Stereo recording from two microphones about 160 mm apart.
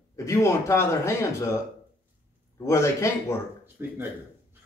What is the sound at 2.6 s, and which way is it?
Speech, 20° left (ahead or behind).